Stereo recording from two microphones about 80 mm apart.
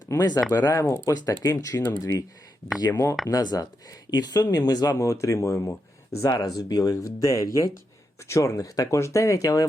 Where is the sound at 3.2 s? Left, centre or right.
Left.